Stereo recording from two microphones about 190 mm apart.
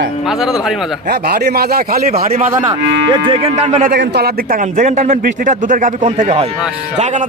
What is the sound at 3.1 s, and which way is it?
Speech, 25° right (ahead or behind).